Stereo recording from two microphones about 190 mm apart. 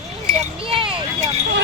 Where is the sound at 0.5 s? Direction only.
30° right (ahead or behind).